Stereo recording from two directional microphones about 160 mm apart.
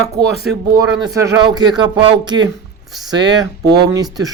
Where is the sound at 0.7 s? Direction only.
20° right (ahead or behind).